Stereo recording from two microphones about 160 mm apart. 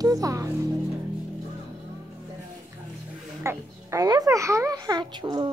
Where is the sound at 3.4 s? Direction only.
15° right (ahead or behind).